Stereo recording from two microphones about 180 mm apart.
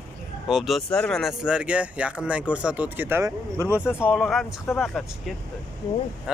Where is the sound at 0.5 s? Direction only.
Centre (ahead or behind); by 3.7 s 15° right (ahead or behind).